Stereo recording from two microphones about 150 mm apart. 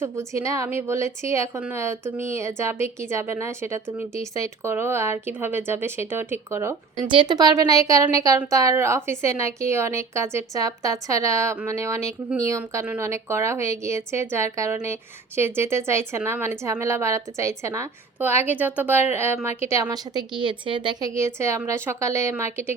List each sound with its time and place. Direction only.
0.0 s a woman's voice: 20° right (ahead or behind)
6.9 s a woman's voice: 30° right (ahead or behind)
21.1 s a woman's voice: 20° right (ahead or behind)